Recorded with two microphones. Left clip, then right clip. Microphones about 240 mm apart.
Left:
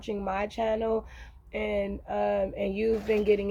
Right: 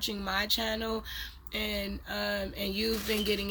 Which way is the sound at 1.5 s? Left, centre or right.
Centre.